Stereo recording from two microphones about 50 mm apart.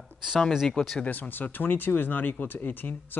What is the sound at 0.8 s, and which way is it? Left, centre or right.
Speech, left.